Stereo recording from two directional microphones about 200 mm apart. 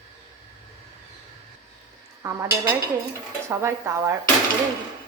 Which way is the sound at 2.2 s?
15° right (ahead or behind).